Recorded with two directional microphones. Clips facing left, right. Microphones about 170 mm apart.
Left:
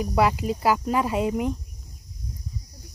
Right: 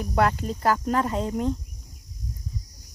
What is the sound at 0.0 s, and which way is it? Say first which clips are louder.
Speech: left 1 dB; 5° left (ahead or behind).